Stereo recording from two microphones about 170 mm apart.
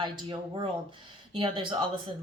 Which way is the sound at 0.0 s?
25° right (ahead or behind).